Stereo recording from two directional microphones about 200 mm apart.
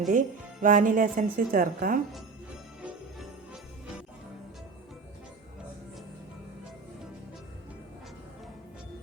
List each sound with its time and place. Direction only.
0.1 s speech: 40° right (ahead or behind)
2.8 s jingle bell: 5° right (ahead or behind)